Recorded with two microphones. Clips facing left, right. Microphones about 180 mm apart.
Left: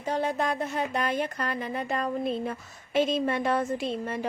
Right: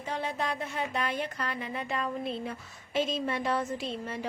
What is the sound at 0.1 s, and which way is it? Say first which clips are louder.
Speech: left 6 dB; 45° left (ahead or behind).